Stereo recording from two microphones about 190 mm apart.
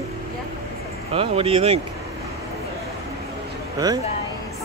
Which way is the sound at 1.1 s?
30° right (ahead or behind).